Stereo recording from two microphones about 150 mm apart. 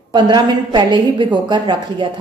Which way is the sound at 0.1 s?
25° right (ahead or behind).